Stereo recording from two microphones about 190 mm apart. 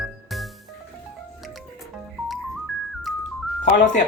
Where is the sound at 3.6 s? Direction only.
40° left (ahead or behind).